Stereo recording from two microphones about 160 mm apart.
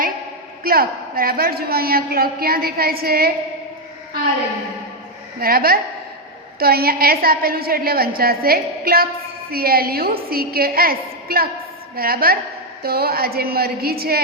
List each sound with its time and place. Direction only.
0.6 s a man's voice: 70° right (ahead or behind)
5.4 s a man's voice: 70° right (ahead or behind)